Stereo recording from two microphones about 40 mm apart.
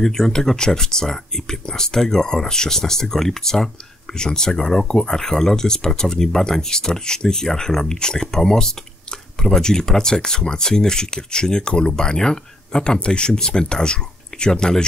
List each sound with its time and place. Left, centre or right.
0.0 s speech: centre